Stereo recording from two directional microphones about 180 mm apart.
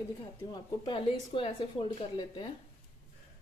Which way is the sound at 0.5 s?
25° left (ahead or behind).